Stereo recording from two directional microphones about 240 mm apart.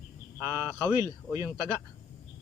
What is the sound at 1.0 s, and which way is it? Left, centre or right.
Speech, centre.